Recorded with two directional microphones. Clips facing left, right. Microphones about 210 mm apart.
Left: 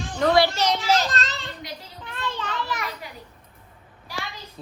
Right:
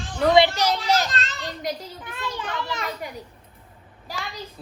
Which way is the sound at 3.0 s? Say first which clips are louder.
Right 6 dB; 45° right (ahead or behind).